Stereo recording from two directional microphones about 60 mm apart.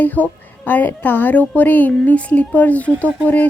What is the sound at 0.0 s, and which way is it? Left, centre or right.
A woman's voice, left.